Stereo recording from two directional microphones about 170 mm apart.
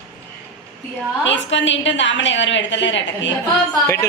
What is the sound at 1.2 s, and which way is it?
A woman's voice, 90° left.